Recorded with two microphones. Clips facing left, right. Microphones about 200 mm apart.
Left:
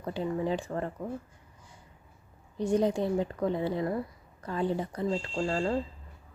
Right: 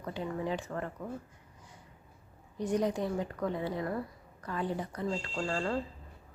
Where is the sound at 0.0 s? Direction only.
30° left (ahead or behind).